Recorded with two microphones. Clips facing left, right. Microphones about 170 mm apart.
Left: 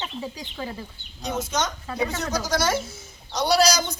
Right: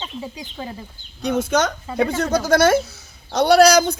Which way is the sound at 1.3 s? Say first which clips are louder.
Right 8 dB; 60° right (ahead or behind).